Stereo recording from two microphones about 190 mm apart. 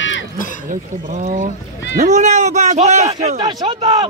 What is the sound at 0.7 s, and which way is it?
Speech, 40° right (ahead or behind).